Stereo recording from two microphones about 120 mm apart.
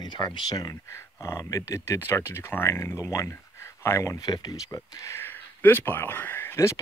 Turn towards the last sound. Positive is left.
turn(degrees=25)  # may be behind; listen again after turning